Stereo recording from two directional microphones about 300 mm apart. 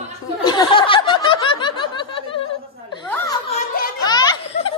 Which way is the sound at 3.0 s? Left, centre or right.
Centre.